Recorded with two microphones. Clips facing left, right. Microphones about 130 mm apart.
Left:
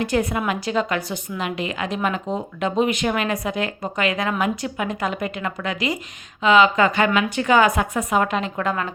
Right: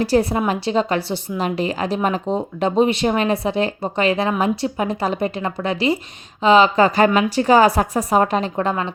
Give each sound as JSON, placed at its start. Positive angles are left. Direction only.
{"t": 0.0, "sound": "a woman's voice", "side_deg": -35}